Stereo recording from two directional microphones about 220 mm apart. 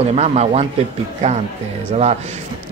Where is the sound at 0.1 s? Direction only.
30° right (ahead or behind).